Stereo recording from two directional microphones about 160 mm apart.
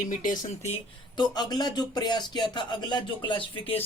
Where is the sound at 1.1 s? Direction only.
25° left (ahead or behind).